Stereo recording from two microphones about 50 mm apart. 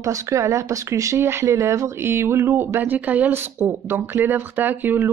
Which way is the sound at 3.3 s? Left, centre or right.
Right.